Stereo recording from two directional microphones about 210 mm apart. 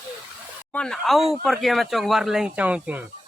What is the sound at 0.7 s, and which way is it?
Speech, 5° left (ahead or behind).